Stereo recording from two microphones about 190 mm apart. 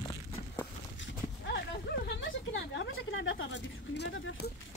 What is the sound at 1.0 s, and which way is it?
Clip-clop, 75° left (ahead or behind).